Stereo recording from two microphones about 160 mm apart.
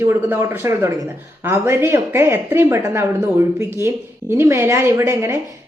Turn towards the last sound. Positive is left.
turn(degrees=-15)  # may be behind; listen again after turning